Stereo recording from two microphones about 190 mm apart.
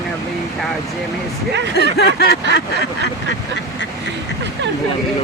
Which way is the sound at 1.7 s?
60° left (ahead or behind).